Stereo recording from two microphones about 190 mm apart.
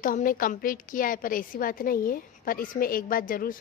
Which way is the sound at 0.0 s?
45° left (ahead or behind).